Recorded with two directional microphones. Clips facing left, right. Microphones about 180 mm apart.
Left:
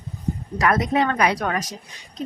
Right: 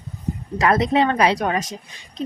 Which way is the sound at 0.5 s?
25° right (ahead or behind).